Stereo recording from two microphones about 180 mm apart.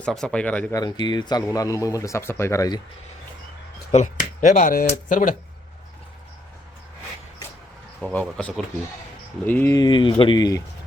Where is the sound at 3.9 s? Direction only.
45° left (ahead or behind).